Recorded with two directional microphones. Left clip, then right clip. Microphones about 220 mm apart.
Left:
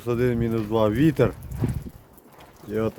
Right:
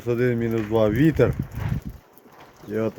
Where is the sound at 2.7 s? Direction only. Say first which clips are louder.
Even; 5° left (ahead or behind).